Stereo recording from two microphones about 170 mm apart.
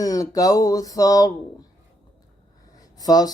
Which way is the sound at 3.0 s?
20° left (ahead or behind).